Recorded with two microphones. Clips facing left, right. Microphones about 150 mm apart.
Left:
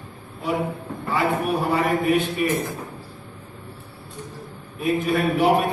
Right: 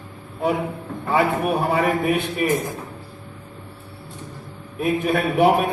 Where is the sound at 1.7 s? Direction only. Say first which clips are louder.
Left 3 dB; 55° right (ahead or behind).